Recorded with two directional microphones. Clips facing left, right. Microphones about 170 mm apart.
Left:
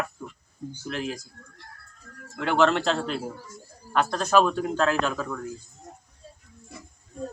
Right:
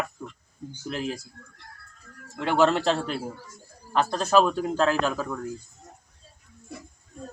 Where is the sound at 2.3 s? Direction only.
Centre (ahead or behind).